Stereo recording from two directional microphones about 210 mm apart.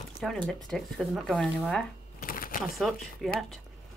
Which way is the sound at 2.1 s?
40° left (ahead or behind).